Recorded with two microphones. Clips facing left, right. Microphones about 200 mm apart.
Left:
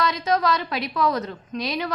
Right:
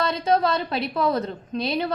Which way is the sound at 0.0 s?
30° right (ahead or behind).